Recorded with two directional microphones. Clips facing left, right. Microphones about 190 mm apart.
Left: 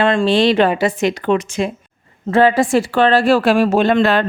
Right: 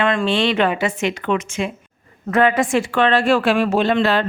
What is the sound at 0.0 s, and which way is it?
A woman's voice, 30° left (ahead or behind).